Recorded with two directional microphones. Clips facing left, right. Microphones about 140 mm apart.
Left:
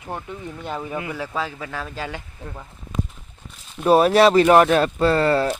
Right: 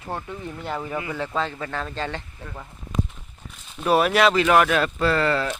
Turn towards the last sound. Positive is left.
turn(degrees=30)  # may be behind; listen again after turning